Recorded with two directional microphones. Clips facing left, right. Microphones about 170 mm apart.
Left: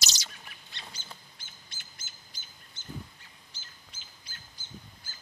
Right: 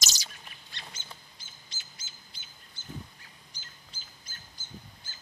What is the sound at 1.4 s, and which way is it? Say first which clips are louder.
Bird: even; 55° left (ahead or behind).